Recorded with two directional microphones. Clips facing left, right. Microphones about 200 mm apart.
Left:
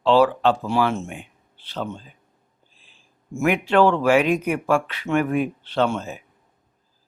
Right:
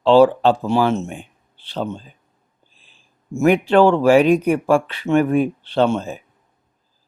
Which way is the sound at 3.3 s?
35° right (ahead or behind).